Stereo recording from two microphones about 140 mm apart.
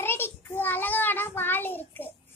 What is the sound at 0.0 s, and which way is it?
Child singing, 15° left (ahead or behind).